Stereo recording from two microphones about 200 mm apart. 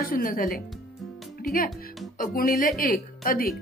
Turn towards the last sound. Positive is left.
turn(degrees=45)  # may be behind; listen again after turning